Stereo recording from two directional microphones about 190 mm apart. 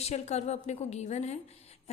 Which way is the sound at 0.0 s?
35° left (ahead or behind).